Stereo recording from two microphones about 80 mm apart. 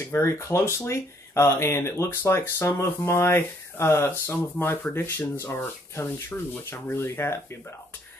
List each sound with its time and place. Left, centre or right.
0.2 s speech: left